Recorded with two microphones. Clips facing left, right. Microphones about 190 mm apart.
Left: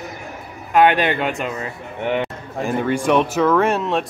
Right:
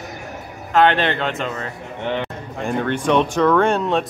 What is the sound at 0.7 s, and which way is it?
A man's voice, 10° left (ahead or behind).